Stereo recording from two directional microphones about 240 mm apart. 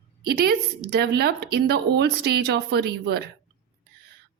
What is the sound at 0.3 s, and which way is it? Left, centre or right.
Speech, right.